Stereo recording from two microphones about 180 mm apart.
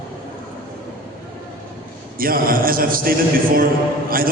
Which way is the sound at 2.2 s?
55° right (ahead or behind).